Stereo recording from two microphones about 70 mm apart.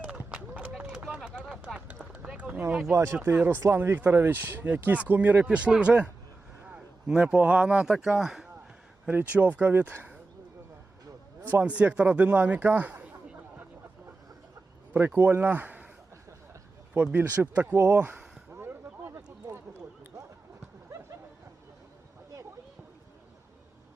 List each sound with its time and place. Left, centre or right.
0.0 s clip-clop: right
0.9 s a sound: centre
1.4 s run: centre
2.9 s speech: right
3.3 s speech: right; by 8.4 s centre
9.1 s speech: right
11.6 s speech: centre
14.9 s speech: right
16.9 s speech: right
17.7 s speech: right
18.5 s a sound: right